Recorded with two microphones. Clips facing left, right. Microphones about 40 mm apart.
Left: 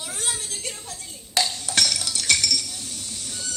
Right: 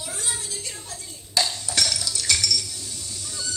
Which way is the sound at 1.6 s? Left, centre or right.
Left.